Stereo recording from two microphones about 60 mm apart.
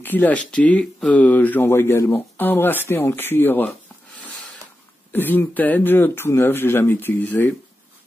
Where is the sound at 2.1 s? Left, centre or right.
Left.